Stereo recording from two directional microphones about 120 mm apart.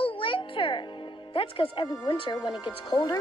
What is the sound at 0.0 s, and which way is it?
Music, 45° left (ahead or behind).